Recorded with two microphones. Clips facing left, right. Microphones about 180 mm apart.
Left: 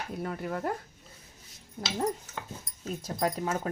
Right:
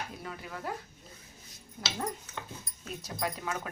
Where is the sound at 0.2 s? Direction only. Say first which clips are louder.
Left 8 dB; 50° left (ahead or behind).